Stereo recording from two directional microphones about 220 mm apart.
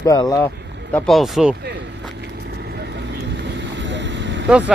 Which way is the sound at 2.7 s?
50° right (ahead or behind).